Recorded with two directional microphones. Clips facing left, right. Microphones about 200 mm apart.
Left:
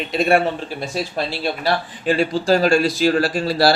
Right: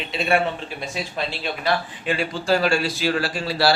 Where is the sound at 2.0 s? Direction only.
40° left (ahead or behind).